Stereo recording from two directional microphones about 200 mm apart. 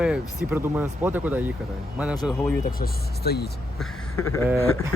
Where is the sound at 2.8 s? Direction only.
50° left (ahead or behind).